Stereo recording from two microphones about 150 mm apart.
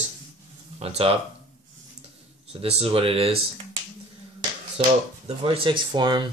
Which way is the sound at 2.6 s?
40° right (ahead or behind).